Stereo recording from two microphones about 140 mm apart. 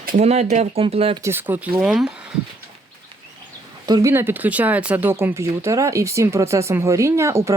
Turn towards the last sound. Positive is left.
turn(degrees=-20)  # may be behind; listen again after turning